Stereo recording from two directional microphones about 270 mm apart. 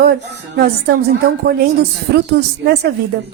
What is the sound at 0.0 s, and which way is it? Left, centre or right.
Speech, right.